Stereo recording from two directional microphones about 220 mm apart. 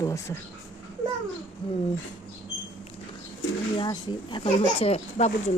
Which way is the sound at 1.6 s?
20° left (ahead or behind).